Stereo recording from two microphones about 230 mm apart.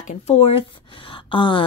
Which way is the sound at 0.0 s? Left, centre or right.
Left.